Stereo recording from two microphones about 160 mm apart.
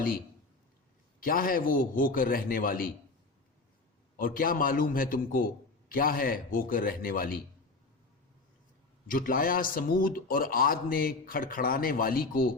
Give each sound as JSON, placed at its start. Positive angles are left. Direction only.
{"t": 1.2, "sound": "speech", "side_deg": 65}
{"t": 4.2, "sound": "speech", "side_deg": 60}
{"t": 9.0, "sound": "speech", "side_deg": 60}